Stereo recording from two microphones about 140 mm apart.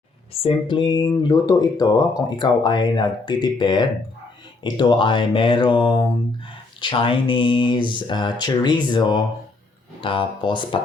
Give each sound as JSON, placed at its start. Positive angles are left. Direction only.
{"t": 0.4, "sound": "speech", "side_deg": 35}